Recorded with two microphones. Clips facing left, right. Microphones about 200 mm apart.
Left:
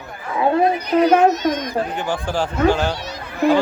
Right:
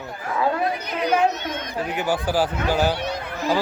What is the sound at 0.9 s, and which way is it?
Speech, 40° left (ahead or behind).